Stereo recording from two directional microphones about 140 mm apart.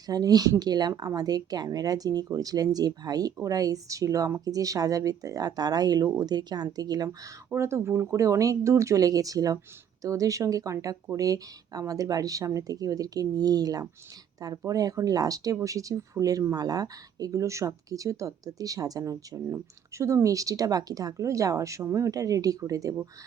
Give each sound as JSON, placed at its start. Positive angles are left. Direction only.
{"t": 0.1, "sound": "speech", "side_deg": -25}